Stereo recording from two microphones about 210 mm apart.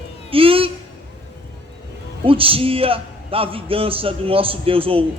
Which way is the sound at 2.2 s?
25° right (ahead or behind).